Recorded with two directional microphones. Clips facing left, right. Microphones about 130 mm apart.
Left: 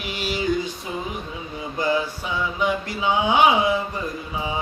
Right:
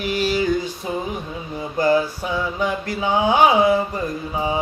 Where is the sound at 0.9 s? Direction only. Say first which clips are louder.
Right 4 dB; 40° right (ahead or behind).